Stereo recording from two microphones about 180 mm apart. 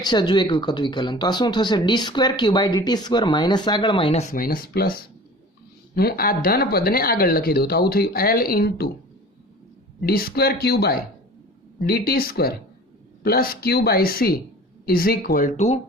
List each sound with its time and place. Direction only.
0.0 s speech: 25° left (ahead or behind); by 8.9 s 60° left (ahead or behind)
10.1 s speech: 55° left (ahead or behind); by 15.8 s 40° left (ahead or behind)